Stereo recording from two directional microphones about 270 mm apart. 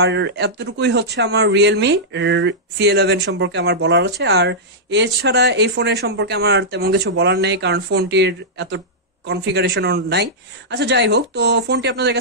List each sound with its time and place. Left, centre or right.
0.0 s speech: right